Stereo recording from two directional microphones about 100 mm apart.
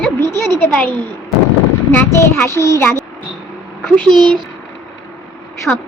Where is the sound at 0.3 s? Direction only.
25° left (ahead or behind).